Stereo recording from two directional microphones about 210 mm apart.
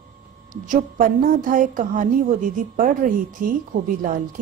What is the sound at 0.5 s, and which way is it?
A woman's voice, 40° right (ahead or behind).